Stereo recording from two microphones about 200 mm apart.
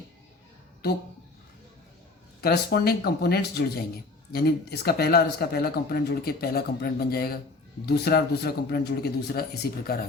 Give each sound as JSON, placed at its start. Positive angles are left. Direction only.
{"t": 2.4, "sound": "speech", "side_deg": 50}